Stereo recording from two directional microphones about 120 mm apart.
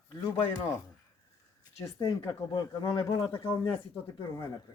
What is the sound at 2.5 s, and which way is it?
Speech, 40° left (ahead or behind).